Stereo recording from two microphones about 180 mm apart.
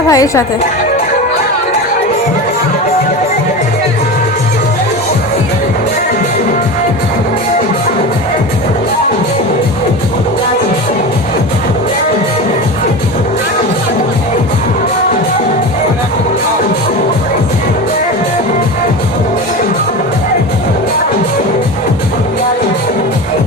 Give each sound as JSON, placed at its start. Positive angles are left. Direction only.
{"t": 0.1, "sound": "a woman's voice", "side_deg": 20}